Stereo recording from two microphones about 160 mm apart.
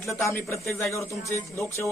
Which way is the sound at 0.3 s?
15° left (ahead or behind).